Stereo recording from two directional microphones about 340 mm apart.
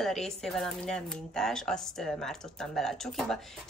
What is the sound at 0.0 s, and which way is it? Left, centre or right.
A woman's voice, centre.